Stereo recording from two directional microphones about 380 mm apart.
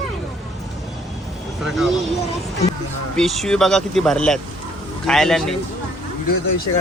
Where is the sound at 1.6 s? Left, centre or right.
Centre.